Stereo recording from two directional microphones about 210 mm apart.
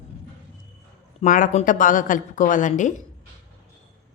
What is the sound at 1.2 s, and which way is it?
A woman's voice, 35° left (ahead or behind).